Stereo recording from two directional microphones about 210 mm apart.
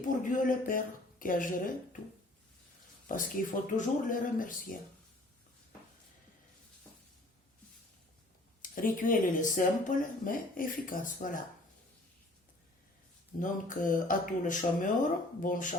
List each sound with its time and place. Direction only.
0.0 s speech: 40° left (ahead or behind)
3.1 s speech: 40° left (ahead or behind)
8.6 s speech: 40° left (ahead or behind)
13.4 s speech: 40° left (ahead or behind)